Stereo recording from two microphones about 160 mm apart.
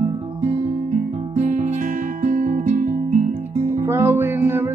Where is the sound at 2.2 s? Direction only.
50° right (ahead or behind).